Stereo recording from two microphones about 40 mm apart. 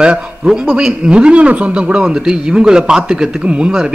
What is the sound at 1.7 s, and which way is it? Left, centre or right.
A man's voice, right.